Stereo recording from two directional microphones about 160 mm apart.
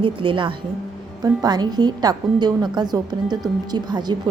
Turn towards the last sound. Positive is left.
turn(degrees=-25)  # may be behind; listen again after turning